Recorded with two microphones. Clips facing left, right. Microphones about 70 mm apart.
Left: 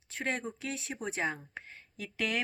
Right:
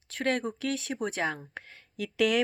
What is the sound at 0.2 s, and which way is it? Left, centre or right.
Speech, right.